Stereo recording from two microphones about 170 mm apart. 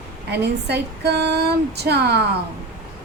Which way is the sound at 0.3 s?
80° right.